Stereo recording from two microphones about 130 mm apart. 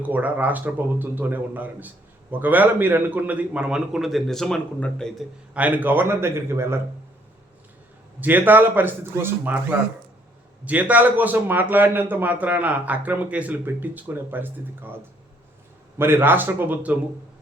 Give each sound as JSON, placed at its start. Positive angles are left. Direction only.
{"t": 0.0, "sound": "a man's voice", "side_deg": -15}
{"t": 5.5, "sound": "speech", "side_deg": -10}
{"t": 8.2, "sound": "a man's voice", "side_deg": -15}
{"t": 16.0, "sound": "a man's voice", "side_deg": -15}